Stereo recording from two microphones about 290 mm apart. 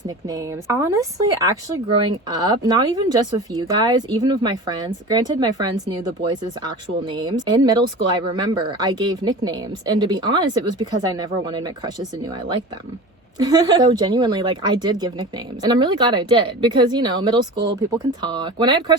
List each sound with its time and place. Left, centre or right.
0.3 s speech: centre
7.1 s speech: centre